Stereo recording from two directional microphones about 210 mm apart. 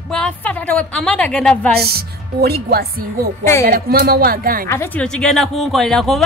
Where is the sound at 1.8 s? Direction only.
50° right (ahead or behind).